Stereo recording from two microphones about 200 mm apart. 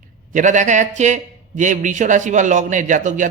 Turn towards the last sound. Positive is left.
turn(degrees=-40)  # may be behind; listen again after turning